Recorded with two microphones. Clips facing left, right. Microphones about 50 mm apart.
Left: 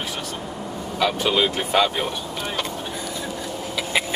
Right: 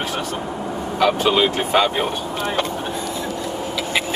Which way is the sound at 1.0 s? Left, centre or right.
Right.